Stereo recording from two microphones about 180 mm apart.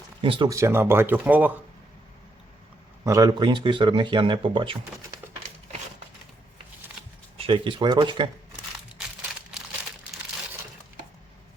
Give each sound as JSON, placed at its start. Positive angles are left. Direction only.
{"t": 0.2, "sound": "speech", "side_deg": -30}
{"t": 0.4, "sound": "speech", "side_deg": -15}
{"t": 3.0, "sound": "speech", "side_deg": -20}
{"t": 7.3, "sound": "speech", "side_deg": -30}